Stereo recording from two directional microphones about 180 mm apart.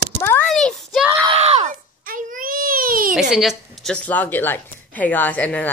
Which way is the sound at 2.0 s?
50° right (ahead or behind).